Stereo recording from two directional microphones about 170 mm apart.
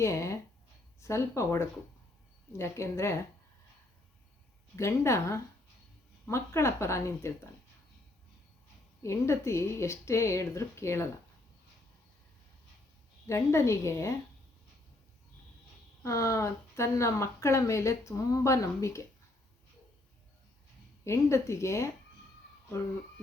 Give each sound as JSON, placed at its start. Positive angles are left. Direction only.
{"t": 0.0, "sound": "speech", "side_deg": 15}
{"t": 4.8, "sound": "speech", "side_deg": 15}
{"t": 9.0, "sound": "speech", "side_deg": 15}
{"t": 13.2, "sound": "speech", "side_deg": 15}
{"t": 16.0, "sound": "speech", "side_deg": 20}
{"t": 21.0, "sound": "speech", "side_deg": 15}